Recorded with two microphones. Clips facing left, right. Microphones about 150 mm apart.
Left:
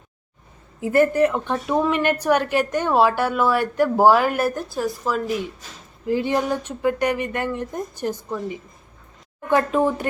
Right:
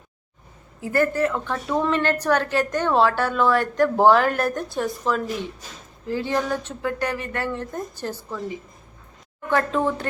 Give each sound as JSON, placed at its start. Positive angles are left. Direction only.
{"t": 0.8, "sound": "a woman's voice", "side_deg": 20}
{"t": 6.1, "sound": "a woman's voice", "side_deg": 15}
{"t": 9.5, "sound": "a woman's voice", "side_deg": 15}